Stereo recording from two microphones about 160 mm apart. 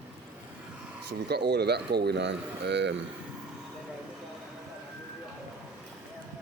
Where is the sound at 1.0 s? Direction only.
90° right.